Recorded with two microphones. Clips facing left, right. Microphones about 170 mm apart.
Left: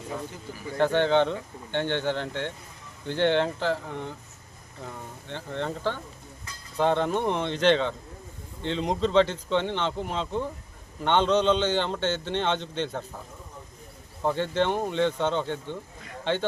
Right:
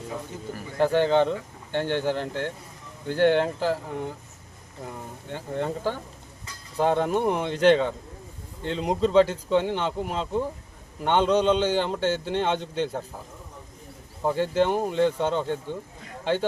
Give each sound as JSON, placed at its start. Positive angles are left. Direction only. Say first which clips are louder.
{"t": 0.8, "sound": "a man's voice", "louder": "right 1 dB", "side_deg": -5}
{"t": 14.2, "sound": "speech", "louder": "right 2 dB", "side_deg": -5}